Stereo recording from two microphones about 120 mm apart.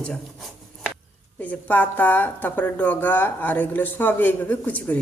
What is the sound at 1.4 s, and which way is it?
Speech, 15° left (ahead or behind).